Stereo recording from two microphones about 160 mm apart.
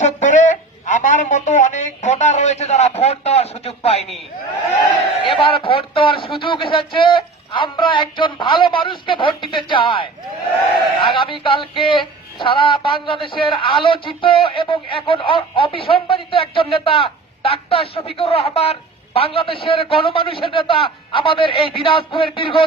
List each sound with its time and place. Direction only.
0.0 s speech: 50° left (ahead or behind)
5.3 s speech: 35° left (ahead or behind)